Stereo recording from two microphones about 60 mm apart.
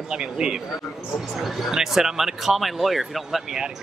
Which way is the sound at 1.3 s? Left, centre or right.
Centre.